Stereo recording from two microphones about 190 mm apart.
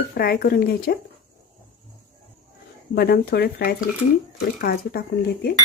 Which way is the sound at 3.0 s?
55° left (ahead or behind).